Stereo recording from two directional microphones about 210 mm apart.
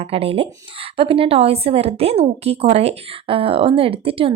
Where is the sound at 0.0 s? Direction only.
25° right (ahead or behind).